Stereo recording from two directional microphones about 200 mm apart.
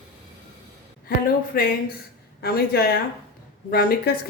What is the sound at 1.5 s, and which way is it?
A woman's voice, 50° left (ahead or behind).